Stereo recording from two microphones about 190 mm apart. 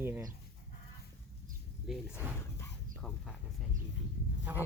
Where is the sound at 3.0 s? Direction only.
5° left (ahead or behind).